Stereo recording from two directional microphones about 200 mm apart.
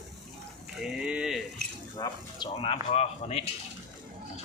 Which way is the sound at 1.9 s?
20° left (ahead or behind).